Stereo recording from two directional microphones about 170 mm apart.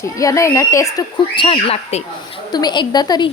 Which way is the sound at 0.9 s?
30° left (ahead or behind).